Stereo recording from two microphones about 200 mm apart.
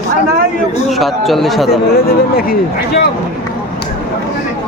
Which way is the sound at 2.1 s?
50° left (ahead or behind).